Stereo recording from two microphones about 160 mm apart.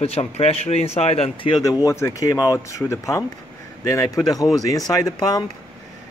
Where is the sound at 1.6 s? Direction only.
20° left (ahead or behind).